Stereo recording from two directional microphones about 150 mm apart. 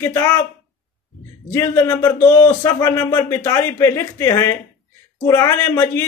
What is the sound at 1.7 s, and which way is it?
A man's voice, 25° left (ahead or behind).